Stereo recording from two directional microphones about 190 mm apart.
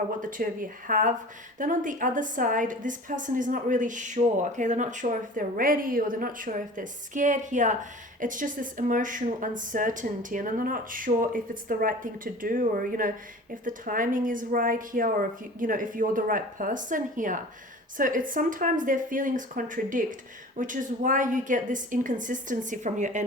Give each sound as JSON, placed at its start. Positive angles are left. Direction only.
{"t": 0.2, "sound": "a woman's voice", "side_deg": -45}